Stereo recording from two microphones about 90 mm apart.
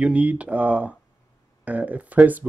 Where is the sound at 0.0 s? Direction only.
15° right (ahead or behind).